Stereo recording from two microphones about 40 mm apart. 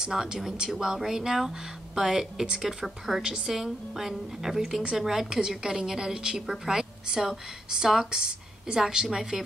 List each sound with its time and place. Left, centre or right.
0.0 s a woman's voice: centre